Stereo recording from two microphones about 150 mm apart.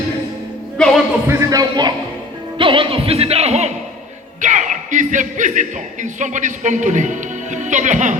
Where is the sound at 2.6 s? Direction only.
35° right (ahead or behind).